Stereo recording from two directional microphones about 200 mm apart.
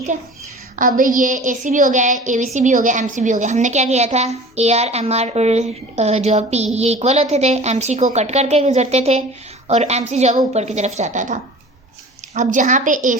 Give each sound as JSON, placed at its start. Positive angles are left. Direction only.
{"t": 0.8, "sound": "a woman's voice", "side_deg": -40}